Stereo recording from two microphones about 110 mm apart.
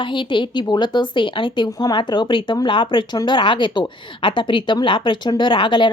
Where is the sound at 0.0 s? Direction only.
45° left (ahead or behind).